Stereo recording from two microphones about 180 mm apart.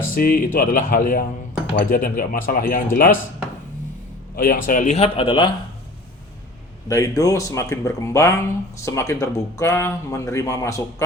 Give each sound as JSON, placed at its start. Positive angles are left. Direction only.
{"t": 0.1, "sound": "speech", "side_deg": 55}
{"t": 4.4, "sound": "speech", "side_deg": 50}
{"t": 6.8, "sound": "speech", "side_deg": 20}